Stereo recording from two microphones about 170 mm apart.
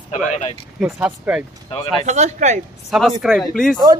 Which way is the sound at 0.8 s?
5° right (ahead or behind).